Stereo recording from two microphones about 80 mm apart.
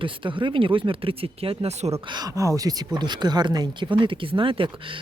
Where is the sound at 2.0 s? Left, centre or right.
Right.